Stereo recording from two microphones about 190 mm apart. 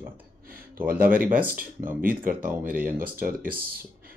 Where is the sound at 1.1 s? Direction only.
45° right (ahead or behind).